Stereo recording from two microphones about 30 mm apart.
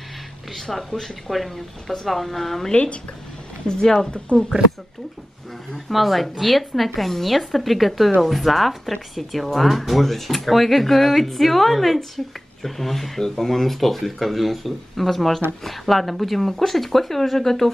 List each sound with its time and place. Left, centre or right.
0.5 s speech: centre
2.7 s speech: left
3.6 s speech: left
4.3 s speech: left
5.9 s speech: centre